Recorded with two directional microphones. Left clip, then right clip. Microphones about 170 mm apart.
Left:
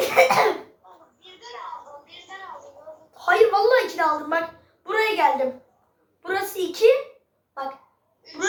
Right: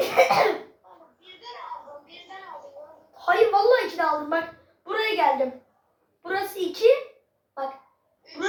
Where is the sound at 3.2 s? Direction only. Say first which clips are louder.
Left 1 dB; 70° left (ahead or behind).